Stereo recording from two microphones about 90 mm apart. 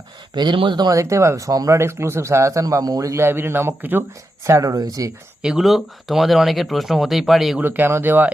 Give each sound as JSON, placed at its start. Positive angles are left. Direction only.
{"t": 0.3, "sound": "speech", "side_deg": -60}
{"t": 0.9, "sound": "speech", "side_deg": -35}
{"t": 4.4, "sound": "speech", "side_deg": -35}
{"t": 5.4, "sound": "speech", "side_deg": -5}
{"t": 7.6, "sound": "speech", "side_deg": -20}